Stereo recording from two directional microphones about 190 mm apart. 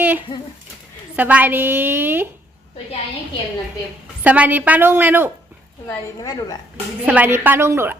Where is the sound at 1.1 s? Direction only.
10° right (ahead or behind).